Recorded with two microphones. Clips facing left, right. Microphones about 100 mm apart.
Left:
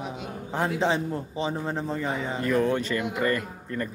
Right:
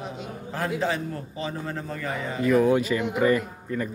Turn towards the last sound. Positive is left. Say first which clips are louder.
# right 2 dB
turn(degrees=-10)  # may be behind; listen again after turning